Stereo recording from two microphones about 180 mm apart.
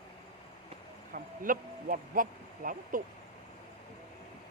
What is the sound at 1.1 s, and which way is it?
Speech, 50° right (ahead or behind).